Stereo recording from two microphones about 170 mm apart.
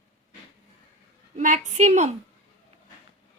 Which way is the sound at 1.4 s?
45° right (ahead or behind).